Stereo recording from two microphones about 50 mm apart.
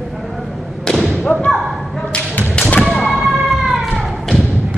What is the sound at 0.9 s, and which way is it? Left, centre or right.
Thump, centre.